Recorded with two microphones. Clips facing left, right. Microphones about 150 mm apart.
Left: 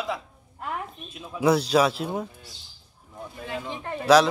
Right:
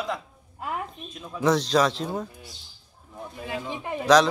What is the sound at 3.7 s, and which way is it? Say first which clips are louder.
Speech: right 1 dB; 10° right (ahead or behind).